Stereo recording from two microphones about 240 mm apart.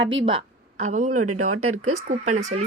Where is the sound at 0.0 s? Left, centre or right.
Right.